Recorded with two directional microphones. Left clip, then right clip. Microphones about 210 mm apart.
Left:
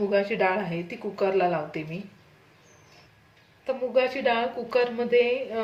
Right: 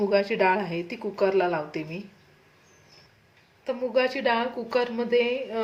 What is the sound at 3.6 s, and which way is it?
A woman's voice, 20° right (ahead or behind).